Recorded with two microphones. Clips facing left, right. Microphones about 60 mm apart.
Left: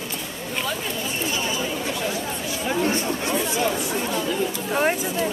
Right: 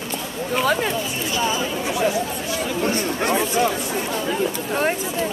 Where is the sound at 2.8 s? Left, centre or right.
Right.